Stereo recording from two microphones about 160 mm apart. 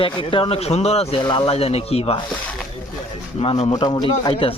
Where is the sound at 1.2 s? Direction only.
30° left (ahead or behind).